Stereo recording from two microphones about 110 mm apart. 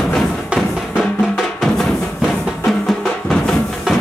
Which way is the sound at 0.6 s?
Centre (ahead or behind).